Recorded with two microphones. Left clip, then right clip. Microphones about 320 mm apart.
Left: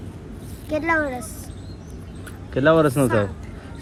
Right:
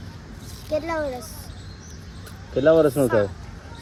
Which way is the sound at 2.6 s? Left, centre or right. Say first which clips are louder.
Even; left.